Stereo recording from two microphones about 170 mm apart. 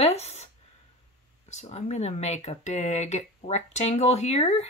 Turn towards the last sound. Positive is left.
turn(degrees=35)  # may be behind; listen again after turning